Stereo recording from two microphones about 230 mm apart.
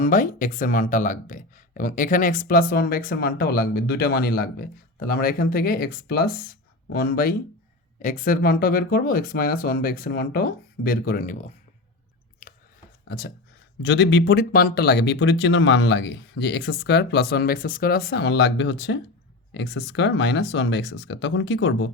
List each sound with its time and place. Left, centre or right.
0.0 s speech: left
12.4 s a sound: left
13.1 s speech: left